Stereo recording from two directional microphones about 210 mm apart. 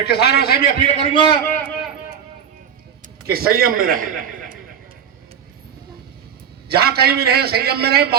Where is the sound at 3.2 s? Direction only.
45° right (ahead or behind).